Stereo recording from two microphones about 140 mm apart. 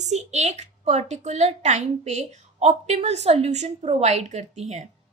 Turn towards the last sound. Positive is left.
turn(degrees=-55)  # may be behind; listen again after turning